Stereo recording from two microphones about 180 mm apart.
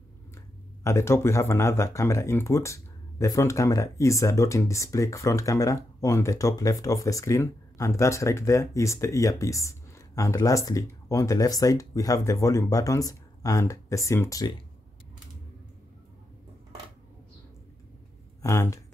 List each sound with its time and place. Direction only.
0.8 s speech: 15° left (ahead or behind)
18.4 s speech: 15° left (ahead or behind)